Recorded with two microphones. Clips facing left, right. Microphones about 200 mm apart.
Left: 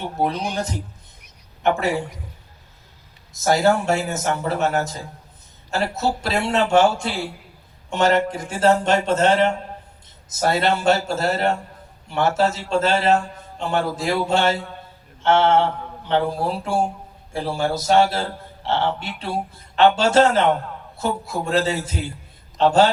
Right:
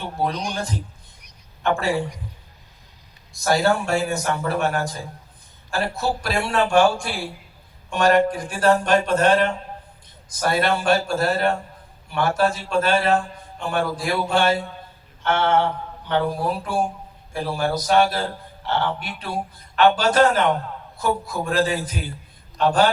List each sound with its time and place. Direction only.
0.0 s a man's voice: 20° left (ahead or behind)
3.3 s a man's voice: 20° left (ahead or behind)
15.2 s mantra: 25° left (ahead or behind)
16.0 s a man's voice: 25° left (ahead or behind)
21.4 s a man's voice: 25° left (ahead or behind)